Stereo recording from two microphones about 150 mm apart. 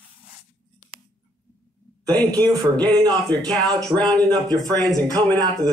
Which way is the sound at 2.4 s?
30° right (ahead or behind).